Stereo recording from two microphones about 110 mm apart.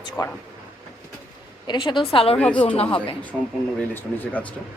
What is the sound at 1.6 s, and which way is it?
Speech, 45° left (ahead or behind).